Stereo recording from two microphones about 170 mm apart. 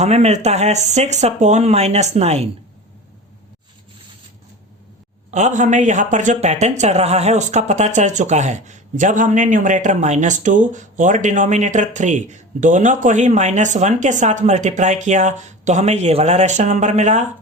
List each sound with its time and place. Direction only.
0.0 s speech: 40° right (ahead or behind)
5.3 s speech: 45° right (ahead or behind)